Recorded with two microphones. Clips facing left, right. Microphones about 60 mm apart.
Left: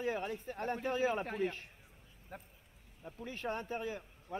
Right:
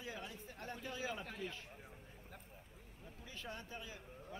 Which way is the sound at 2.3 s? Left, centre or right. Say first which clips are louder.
Left 5 dB; left.